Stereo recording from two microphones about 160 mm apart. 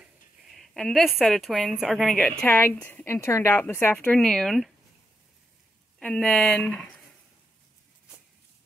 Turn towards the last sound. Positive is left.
turn(degrees=10)  # may be behind; listen again after turning